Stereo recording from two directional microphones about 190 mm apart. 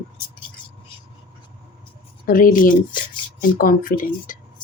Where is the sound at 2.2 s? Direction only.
45° left (ahead or behind).